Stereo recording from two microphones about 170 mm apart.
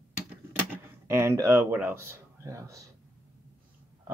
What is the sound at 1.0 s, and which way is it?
Speech, 15° right (ahead or behind).